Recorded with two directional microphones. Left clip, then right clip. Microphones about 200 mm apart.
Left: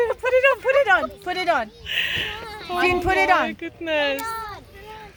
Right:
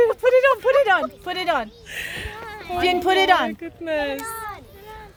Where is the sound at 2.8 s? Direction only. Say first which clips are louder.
Right 1 dB; 45° right (ahead or behind).